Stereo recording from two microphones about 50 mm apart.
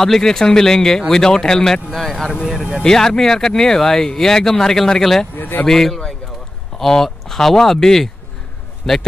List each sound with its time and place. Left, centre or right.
0.0 s speech: centre
2.4 s speech: centre
2.8 s speech: centre
5.3 s speech: left
5.7 s a man's voice: centre